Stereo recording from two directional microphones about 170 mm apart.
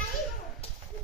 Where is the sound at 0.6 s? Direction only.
35° left (ahead or behind).